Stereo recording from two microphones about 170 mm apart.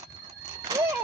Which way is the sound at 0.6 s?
20° right (ahead or behind).